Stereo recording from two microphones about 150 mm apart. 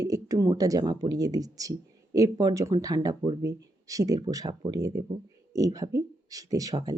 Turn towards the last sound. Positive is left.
turn(degrees=-25)  # may be behind; listen again after turning